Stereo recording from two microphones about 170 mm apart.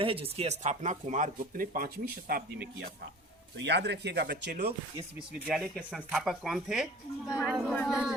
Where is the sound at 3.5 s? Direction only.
90° right.